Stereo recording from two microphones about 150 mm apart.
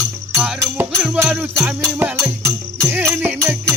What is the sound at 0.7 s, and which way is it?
Music, 10° right (ahead or behind).